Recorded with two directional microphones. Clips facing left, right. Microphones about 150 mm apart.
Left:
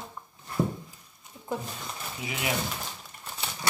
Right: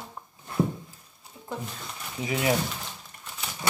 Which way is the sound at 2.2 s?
35° right (ahead or behind).